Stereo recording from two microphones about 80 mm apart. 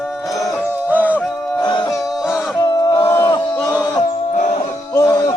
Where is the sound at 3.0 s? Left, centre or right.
Left.